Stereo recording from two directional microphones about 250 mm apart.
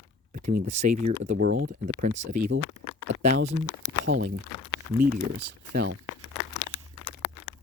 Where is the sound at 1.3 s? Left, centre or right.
Right.